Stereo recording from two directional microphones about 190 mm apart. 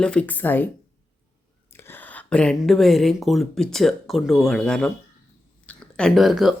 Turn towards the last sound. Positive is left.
turn(degrees=0)  # may be behind; listen again after turning